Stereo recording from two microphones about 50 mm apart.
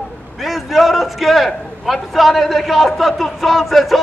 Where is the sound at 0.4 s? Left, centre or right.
Centre.